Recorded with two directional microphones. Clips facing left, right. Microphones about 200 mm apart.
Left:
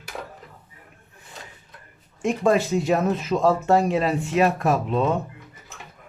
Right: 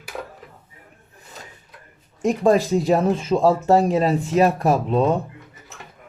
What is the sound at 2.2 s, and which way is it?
Speech, 35° right (ahead or behind).